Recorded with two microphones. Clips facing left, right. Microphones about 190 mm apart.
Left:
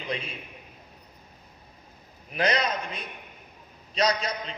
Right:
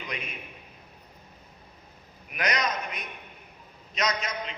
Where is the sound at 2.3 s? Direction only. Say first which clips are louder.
Left 3 dB; 30° left (ahead or behind).